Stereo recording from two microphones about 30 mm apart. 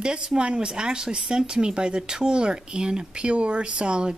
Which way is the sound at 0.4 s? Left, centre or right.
Right.